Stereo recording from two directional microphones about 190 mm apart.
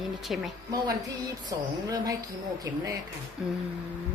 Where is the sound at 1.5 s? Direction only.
20° right (ahead or behind).